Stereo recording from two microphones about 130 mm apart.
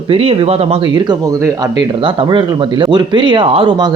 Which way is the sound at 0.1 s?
45° right (ahead or behind).